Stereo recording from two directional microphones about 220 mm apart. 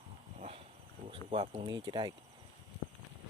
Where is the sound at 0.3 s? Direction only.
30° right (ahead or behind).